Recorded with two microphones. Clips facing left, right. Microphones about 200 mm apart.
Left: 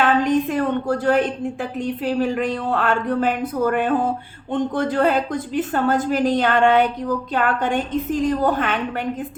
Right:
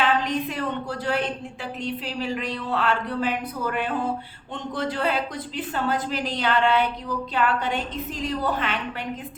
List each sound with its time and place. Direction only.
0.0 s a woman's voice: 50° left (ahead or behind)